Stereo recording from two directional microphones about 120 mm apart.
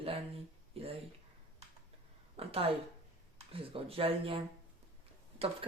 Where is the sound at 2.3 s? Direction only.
50° right (ahead or behind).